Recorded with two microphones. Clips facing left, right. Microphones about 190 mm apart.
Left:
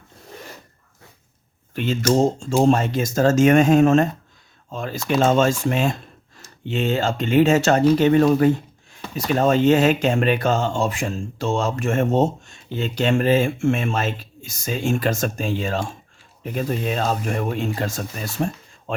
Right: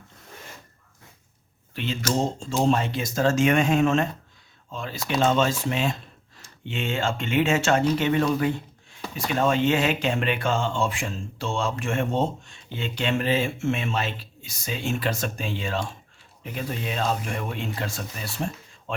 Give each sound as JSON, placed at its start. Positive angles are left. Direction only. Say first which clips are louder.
{"t": 1.7, "sound": "speech", "louder": "left 7 dB", "side_deg": 45}